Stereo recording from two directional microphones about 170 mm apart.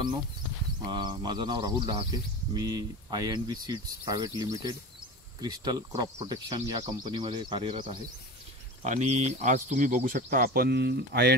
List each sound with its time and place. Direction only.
0.8 s speech: 25° right (ahead or behind)
8.8 s speech: 45° right (ahead or behind); by 11.3 s 75° right (ahead or behind)